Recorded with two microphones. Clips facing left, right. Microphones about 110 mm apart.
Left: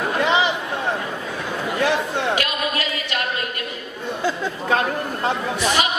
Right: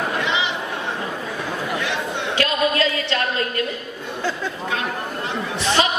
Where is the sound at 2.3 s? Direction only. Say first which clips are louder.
Right 4 dB; 30° right (ahead or behind).